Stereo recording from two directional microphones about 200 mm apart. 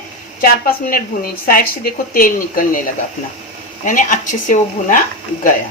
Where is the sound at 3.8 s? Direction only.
40° left (ahead or behind).